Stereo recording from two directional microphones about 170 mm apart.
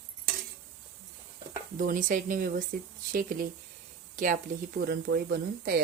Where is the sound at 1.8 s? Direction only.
50° right (ahead or behind).